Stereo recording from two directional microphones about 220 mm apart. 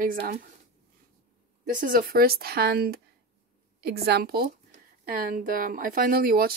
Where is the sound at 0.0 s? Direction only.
40° right (ahead or behind).